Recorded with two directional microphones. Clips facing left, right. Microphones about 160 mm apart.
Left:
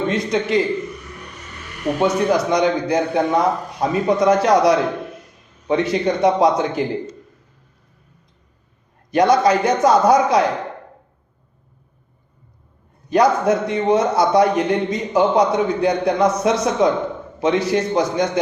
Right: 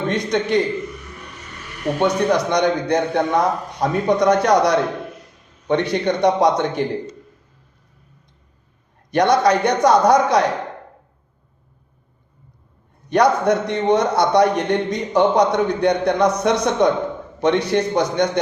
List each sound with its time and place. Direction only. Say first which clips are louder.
0.1 s a man's voice: right 3 dB; 5° left (ahead or behind)
2.0 s a man's voice: even; 5° left (ahead or behind)
9.0 s a man's voice: left 1 dB; centre (ahead or behind)
13.1 s a man's voice: even; centre (ahead or behind)